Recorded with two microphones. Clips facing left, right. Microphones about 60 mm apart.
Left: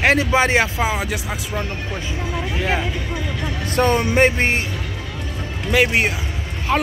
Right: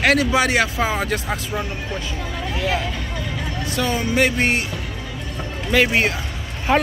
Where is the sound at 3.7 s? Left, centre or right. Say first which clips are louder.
Left 4 dB; left.